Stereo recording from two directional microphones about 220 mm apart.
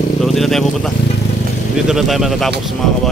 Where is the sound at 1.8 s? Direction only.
Centre (ahead or behind).